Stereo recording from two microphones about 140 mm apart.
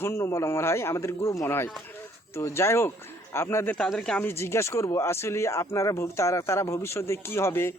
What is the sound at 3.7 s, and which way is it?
Speech, 5° left (ahead or behind).